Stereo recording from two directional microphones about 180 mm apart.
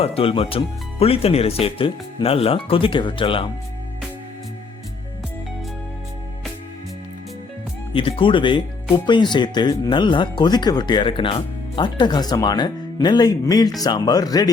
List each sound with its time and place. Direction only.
0.0 s speech: 30° left (ahead or behind)
7.9 s speech: 30° left (ahead or behind)